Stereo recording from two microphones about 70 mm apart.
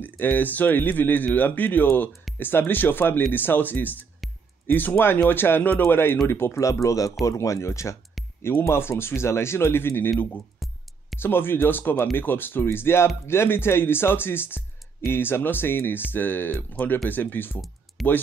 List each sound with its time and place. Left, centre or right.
0.0 s speech: left
6.6 s speech: left
11.1 s speech: left
18.0 s speech: centre